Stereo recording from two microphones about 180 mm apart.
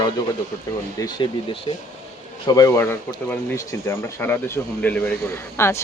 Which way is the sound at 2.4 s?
20° left (ahead or behind).